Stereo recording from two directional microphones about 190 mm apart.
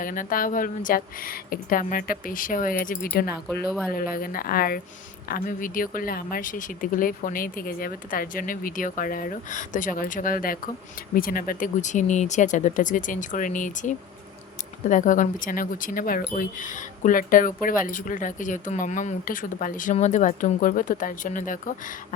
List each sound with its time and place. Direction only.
0.0 s speech: 45° left (ahead or behind)